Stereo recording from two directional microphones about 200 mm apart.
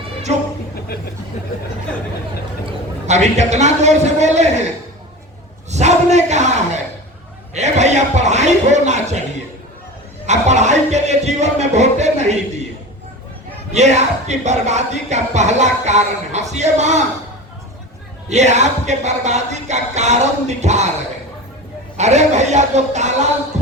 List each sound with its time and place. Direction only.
3.1 s speech: 35° right (ahead or behind)
5.7 s a sound: 35° right (ahead or behind)
7.5 s speech: 35° right (ahead or behind)
10.2 s music: 35° right (ahead or behind)
13.7 s speech: 35° right (ahead or behind)
18.3 s speech: 35° right (ahead or behind)
21.9 s speech: 35° right (ahead or behind)